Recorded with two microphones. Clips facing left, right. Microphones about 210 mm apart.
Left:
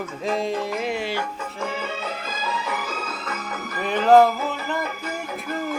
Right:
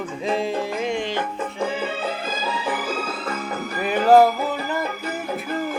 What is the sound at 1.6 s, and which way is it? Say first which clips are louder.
Music: right 4 dB; 30° right (ahead or behind).